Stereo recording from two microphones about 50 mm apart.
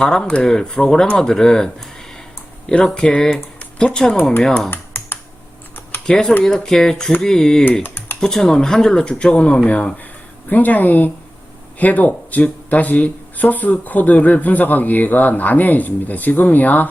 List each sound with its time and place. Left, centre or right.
0.0 s speech: centre
4.7 s typing: left
6.1 s speech: centre
7.8 s typing: left
8.2 s speech: centre; by 16.9 s left